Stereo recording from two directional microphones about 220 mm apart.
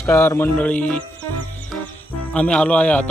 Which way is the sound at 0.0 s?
10° left (ahead or behind).